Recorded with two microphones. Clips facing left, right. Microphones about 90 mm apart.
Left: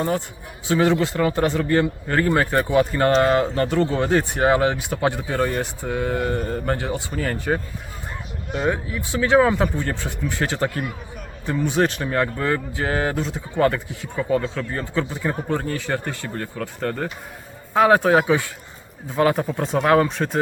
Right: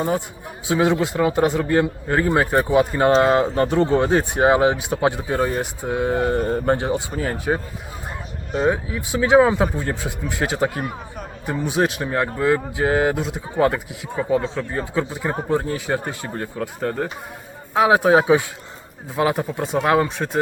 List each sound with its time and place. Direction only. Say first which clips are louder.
0.7 s a man's voice: even; 15° right (ahead or behind)
8.7 s a man's voice: right 2 dB; 15° right (ahead or behind)
19.1 s speech: left 1 dB; 5° right (ahead or behind)